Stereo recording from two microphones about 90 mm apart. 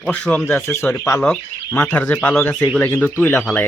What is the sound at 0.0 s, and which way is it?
Speech, 10° left (ahead or behind).